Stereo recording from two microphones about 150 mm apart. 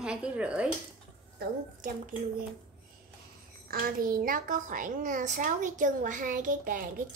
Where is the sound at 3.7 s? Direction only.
75° right (ahead or behind).